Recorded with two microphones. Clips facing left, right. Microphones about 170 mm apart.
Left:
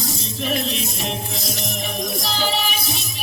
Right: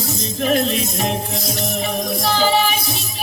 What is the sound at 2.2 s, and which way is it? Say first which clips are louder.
Music: right 9 dB; 45° right (ahead or behind).